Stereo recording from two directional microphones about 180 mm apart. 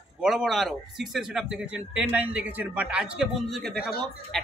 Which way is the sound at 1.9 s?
10° right (ahead or behind).